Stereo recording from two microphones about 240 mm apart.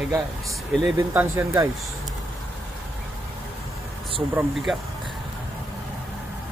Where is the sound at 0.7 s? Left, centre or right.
Centre.